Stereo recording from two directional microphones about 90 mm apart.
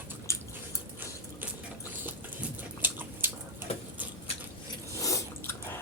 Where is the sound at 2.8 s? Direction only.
20° right (ahead or behind).